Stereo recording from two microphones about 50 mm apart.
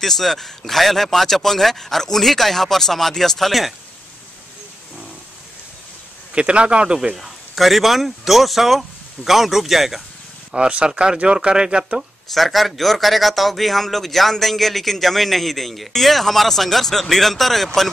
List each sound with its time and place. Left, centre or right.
0.0 s a man's voice: centre
6.3 s speech: right
7.2 s a man's voice: centre
10.5 s speech: centre
12.3 s a man's voice: centre